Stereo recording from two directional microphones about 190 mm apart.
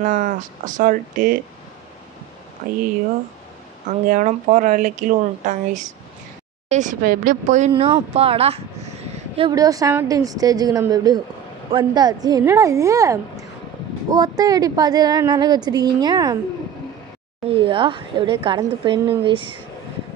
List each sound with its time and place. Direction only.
0.0 s speech: 45° right (ahead or behind)
2.6 s speech: 45° right (ahead or behind)
4.1 s a woman's voice: 45° right (ahead or behind)
9.4 s a woman's voice: 20° right (ahead or behind)
17.5 s a woman's voice: 30° right (ahead or behind)